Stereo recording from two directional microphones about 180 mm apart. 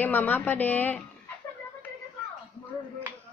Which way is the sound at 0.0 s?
10° left (ahead or behind).